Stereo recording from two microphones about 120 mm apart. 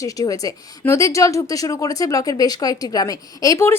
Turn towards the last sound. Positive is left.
turn(degrees=25)  # may be behind; listen again after turning